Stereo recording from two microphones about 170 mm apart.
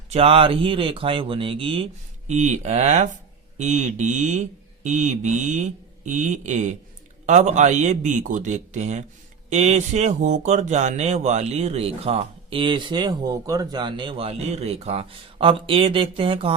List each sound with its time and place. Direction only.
0.1 s speech: 35° right (ahead or behind)